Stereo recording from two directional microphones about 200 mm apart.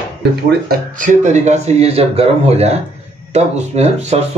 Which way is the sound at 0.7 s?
40° right (ahead or behind).